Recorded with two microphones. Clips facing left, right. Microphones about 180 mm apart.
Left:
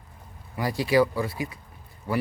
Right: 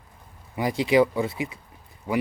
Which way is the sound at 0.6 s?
20° right (ahead or behind).